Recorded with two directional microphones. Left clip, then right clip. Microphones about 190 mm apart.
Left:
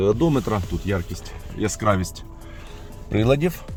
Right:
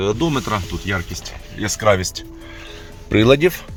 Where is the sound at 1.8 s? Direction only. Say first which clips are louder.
Right 8 dB; 5° right (ahead or behind).